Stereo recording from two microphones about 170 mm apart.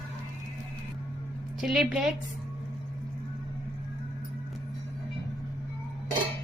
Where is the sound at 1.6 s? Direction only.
Centre (ahead or behind).